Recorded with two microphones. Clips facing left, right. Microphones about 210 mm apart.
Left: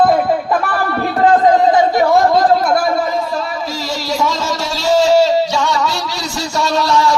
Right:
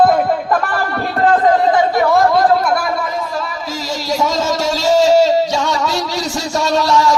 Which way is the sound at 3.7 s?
45° right (ahead or behind).